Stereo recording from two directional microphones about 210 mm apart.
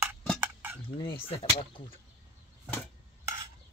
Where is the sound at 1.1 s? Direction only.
25° left (ahead or behind).